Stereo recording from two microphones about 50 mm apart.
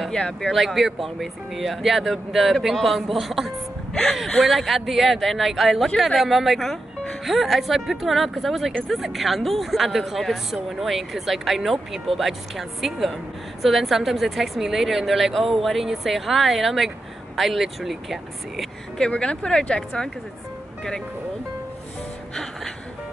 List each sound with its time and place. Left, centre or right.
0.1 s speech: centre
0.5 s speech: centre
3.9 s speech: centre
4.4 s speech: centre
18.9 s speech: centre